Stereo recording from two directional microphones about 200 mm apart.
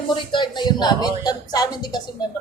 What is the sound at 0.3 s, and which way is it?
Speech, 25° left (ahead or behind).